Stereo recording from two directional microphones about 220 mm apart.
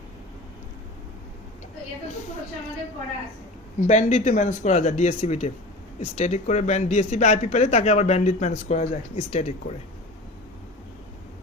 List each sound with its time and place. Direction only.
3.8 s a man's voice: 30° left (ahead or behind)